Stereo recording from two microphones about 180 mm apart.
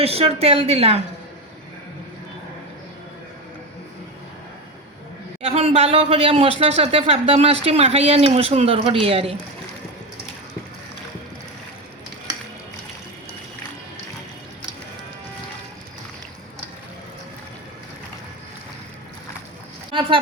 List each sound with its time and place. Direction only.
0.0 s speech: 35° right (ahead or behind)
5.4 s speech: 35° right (ahead or behind)
19.9 s a sound: 25° right (ahead or behind)